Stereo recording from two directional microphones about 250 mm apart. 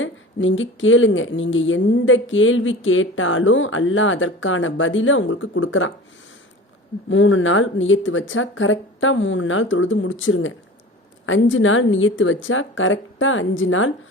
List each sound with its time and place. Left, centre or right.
0.0 s speech: left
7.1 s speech: left